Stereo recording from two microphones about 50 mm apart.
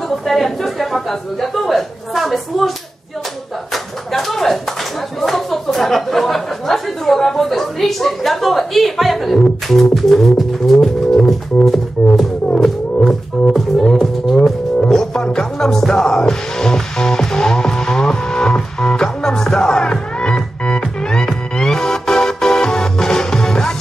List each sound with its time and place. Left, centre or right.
0.1 s a man's voice: centre
3.7 s a sound: centre
5.2 s speech: centre
11.1 s music: centre